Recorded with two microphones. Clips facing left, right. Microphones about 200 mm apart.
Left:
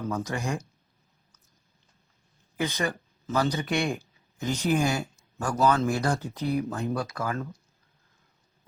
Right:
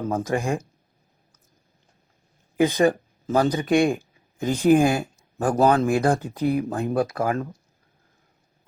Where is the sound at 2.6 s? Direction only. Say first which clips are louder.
Right 10 dB; 45° right (ahead or behind).